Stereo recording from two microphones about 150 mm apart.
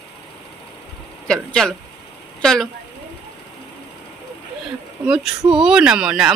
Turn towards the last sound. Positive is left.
turn(degrees=-5)  # may be behind; listen again after turning